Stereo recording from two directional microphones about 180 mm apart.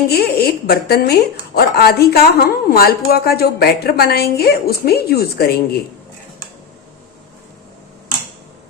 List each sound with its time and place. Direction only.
0.1 s a woman's voice: 60° left (ahead or behind)